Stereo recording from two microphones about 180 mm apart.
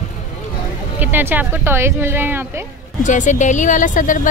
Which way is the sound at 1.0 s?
10° right (ahead or behind).